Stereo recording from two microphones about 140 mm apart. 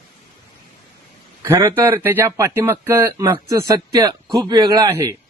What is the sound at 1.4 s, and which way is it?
Speech, 20° right (ahead or behind).